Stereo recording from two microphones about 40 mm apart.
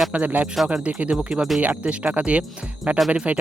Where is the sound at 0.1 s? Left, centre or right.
Right.